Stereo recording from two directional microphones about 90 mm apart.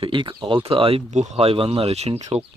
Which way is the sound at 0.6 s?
85° right.